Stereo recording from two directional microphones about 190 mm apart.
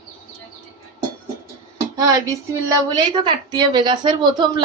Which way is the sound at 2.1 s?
15° right (ahead or behind).